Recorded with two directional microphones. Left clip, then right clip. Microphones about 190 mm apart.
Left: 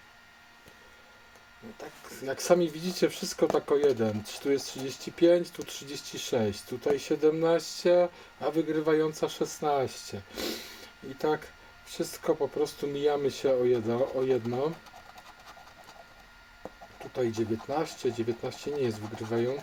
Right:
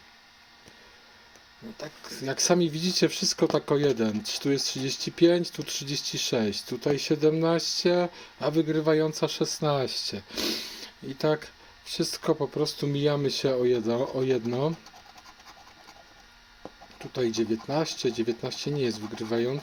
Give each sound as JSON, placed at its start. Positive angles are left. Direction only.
{"t": 1.8, "sound": "speech", "side_deg": -40}
{"t": 17.2, "sound": "speech", "side_deg": -40}